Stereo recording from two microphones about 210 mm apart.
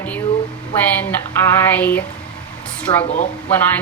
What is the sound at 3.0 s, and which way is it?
Speech, 35° left (ahead or behind).